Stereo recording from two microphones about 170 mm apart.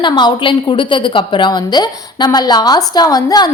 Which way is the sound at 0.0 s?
25° left (ahead or behind).